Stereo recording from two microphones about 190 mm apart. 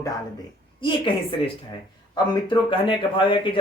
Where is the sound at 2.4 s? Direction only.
25° left (ahead or behind).